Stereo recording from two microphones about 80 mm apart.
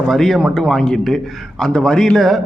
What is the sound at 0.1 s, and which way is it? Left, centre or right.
A man's voice, centre.